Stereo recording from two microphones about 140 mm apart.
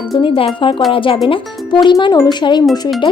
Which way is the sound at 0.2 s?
40° left (ahead or behind).